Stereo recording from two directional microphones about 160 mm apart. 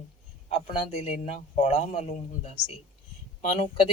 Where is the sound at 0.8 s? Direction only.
40° left (ahead or behind).